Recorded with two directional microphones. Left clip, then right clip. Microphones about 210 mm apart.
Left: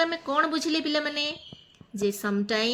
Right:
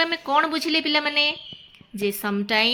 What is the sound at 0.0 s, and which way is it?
A woman's voice, 15° right (ahead or behind).